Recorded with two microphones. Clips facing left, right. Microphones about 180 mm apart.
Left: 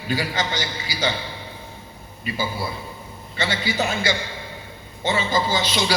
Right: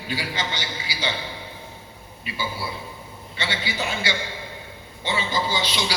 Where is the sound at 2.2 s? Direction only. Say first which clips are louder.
Left 4 dB; 45° left (ahead or behind).